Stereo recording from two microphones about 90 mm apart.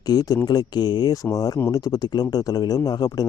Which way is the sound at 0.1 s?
45° left (ahead or behind).